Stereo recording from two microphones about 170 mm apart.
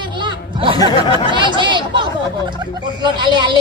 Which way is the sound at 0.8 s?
25° left (ahead or behind).